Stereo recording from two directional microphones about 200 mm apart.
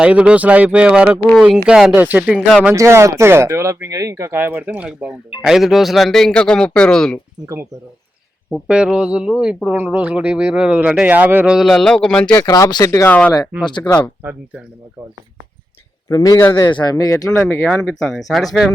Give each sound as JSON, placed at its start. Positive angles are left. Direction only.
{"t": 0.0, "sound": "speech", "side_deg": -5}
{"t": 8.4, "sound": "speech", "side_deg": 0}
{"t": 13.7, "sound": "speech", "side_deg": 20}
{"t": 14.2, "sound": "speech", "side_deg": -10}
{"t": 16.0, "sound": "speech", "side_deg": 15}